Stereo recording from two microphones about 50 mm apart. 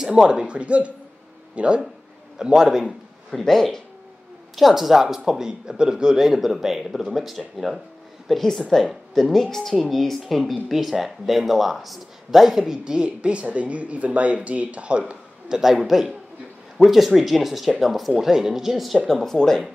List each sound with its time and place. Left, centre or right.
0.0 s speech: centre
2.3 s speech: centre
3.3 s speech: centre
4.6 s speech: centre
8.5 s speech: centre